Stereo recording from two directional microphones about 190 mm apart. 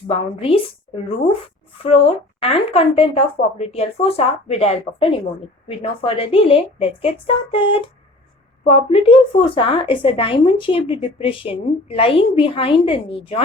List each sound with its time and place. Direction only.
0.1 s speech: 30° left (ahead or behind)
2.4 s speech: 30° left (ahead or behind)